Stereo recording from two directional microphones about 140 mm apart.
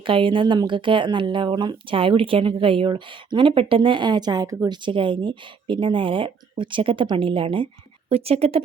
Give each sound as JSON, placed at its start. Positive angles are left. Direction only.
{"t": 0.0, "sound": "speech", "side_deg": -35}
{"t": 4.9, "sound": "speech", "side_deg": -35}